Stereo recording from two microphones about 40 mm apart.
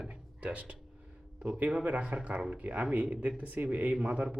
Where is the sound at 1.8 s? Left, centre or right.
Right.